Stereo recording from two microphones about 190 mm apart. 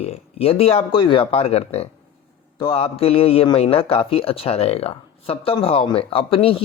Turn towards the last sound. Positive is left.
turn(degrees=30)  # may be behind; listen again after turning